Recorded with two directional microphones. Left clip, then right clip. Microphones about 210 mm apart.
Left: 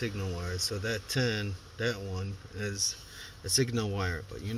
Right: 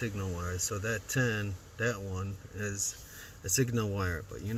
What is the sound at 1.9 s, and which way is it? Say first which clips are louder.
Speech: left 1 dB; 10° right (ahead or behind).